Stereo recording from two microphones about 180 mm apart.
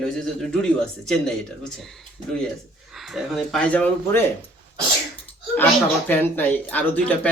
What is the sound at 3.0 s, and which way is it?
Speech, centre (ahead or behind).